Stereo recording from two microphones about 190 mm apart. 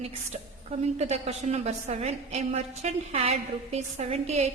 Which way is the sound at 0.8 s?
35° right (ahead or behind).